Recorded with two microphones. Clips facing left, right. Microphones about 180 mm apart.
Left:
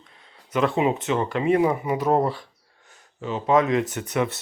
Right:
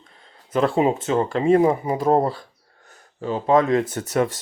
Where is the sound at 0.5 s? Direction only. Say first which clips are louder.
Right 2 dB; 30° right (ahead or behind).